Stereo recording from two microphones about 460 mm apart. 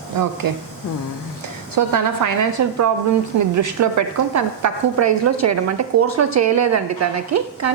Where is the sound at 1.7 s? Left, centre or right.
Right.